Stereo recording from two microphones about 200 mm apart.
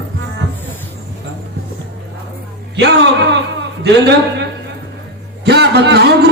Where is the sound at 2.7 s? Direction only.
60° right (ahead or behind).